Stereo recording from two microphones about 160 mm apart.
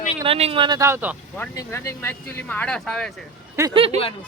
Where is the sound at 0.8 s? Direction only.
15° right (ahead or behind).